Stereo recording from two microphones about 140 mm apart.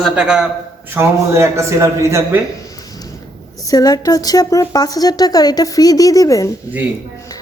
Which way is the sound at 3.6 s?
25° left (ahead or behind).